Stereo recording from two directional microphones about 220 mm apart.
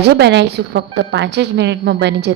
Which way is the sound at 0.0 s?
50° right (ahead or behind).